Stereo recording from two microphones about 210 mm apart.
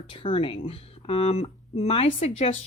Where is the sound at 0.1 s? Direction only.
25° left (ahead or behind).